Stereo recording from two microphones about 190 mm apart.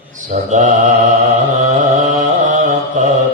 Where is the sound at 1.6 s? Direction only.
40° right (ahead or behind).